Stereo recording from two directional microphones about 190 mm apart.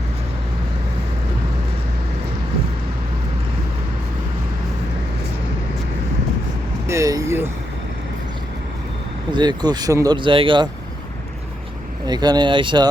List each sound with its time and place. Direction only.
6.8 s vehicle: 15° right (ahead or behind)
9.3 s speech: 20° right (ahead or behind)
12.0 s speech: 20° right (ahead or behind)